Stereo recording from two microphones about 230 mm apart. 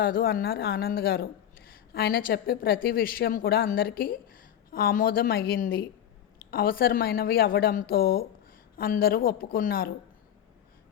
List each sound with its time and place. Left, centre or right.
0.0 s a woman's voice: left